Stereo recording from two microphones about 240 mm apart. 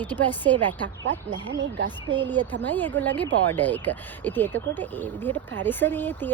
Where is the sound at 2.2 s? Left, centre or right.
Centre.